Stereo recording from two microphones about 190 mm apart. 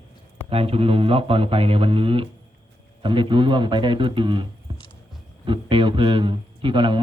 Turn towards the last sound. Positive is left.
turn(degrees=-25)  # may be behind; listen again after turning